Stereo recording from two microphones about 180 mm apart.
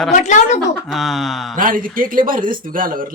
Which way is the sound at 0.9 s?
Centre (ahead or behind).